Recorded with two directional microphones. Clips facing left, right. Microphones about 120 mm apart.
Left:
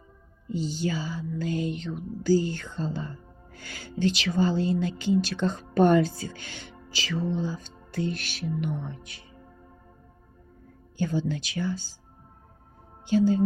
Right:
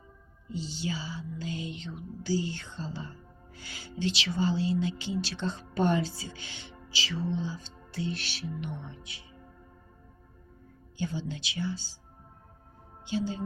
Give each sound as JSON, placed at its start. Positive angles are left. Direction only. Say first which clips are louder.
{"t": 0.5, "sound": "music", "louder": "left 6 dB", "side_deg": 45}
{"t": 10.9, "sound": "music", "louder": "left 7 dB", "side_deg": 50}
{"t": 13.1, "sound": "music", "louder": "left 10 dB", "side_deg": 50}